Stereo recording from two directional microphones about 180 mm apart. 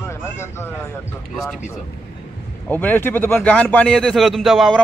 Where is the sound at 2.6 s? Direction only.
10° left (ahead or behind).